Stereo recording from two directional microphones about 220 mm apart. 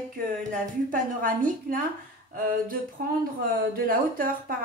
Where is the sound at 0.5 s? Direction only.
40° right (ahead or behind).